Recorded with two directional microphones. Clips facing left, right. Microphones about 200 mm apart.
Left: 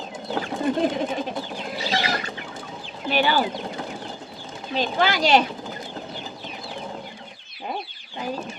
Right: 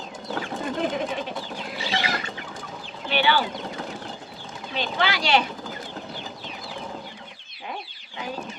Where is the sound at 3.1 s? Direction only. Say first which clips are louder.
Left 1 dB; 40° left (ahead or behind).